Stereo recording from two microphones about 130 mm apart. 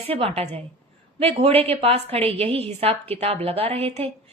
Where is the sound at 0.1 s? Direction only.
50° right (ahead or behind).